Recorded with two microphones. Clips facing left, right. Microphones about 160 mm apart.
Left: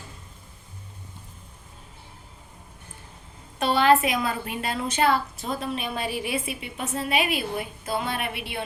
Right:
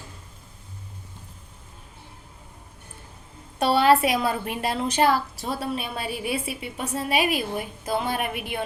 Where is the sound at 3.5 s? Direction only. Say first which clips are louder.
Right 1 dB; 35° right (ahead or behind).